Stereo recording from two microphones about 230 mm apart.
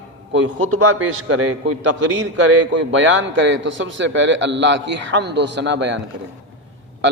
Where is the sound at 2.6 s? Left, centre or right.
Right.